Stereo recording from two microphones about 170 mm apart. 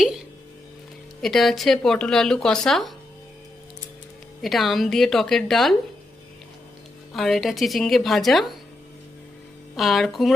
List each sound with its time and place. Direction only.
1.2 s speech: centre (ahead or behind)
4.4 s speech: centre (ahead or behind)
7.1 s speech: centre (ahead or behind)
9.7 s speech: centre (ahead or behind)